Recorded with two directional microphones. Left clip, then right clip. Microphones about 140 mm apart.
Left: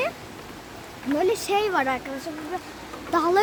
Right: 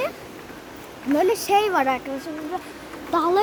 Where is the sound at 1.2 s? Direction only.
5° right (ahead or behind).